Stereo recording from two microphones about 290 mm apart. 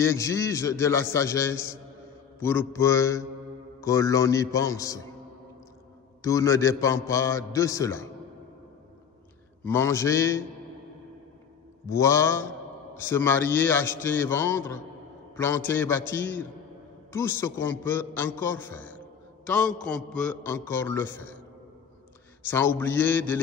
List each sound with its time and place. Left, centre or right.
0.0 s a man's voice: centre
6.2 s a man's voice: centre
9.7 s a man's voice: centre
11.8 s a man's voice: centre
22.8 s a man's voice: centre